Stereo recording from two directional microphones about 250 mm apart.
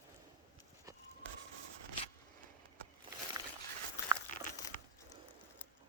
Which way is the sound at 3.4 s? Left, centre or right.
Centre.